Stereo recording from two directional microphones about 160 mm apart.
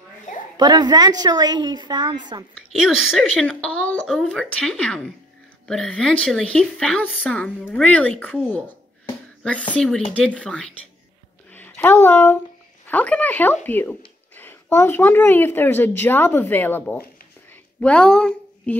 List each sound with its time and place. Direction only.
0.6 s a woman's voice: 25° right (ahead or behind)
2.7 s a woman's voice: centre (ahead or behind)